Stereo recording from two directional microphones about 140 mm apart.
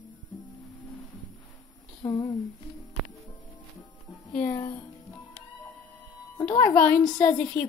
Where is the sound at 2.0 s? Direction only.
35° left (ahead or behind).